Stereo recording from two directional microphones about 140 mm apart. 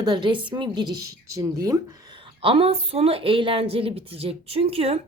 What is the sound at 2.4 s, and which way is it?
A woman's voice, 40° right (ahead or behind).